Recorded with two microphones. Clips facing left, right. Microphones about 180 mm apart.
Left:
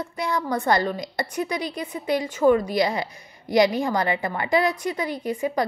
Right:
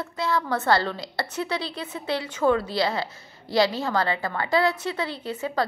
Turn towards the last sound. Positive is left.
turn(degrees=15)  # may be behind; listen again after turning